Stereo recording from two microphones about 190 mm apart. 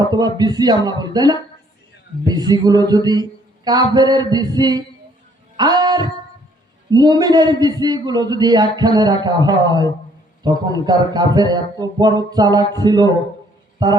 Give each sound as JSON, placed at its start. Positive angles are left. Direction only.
{"t": 0.1, "sound": "a man's voice", "side_deg": -20}
{"t": 5.5, "sound": "music", "side_deg": -20}
{"t": 6.9, "sound": "a man's voice", "side_deg": -20}